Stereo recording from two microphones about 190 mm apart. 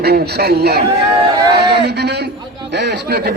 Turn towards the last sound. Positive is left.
turn(degrees=-55)  # may be behind; listen again after turning